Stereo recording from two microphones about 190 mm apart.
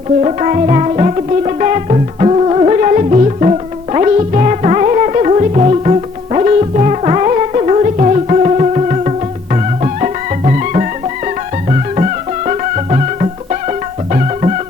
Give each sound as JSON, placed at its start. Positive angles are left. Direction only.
{"t": 0.2, "sound": "music", "side_deg": -35}
{"t": 12.5, "sound": "music", "side_deg": -35}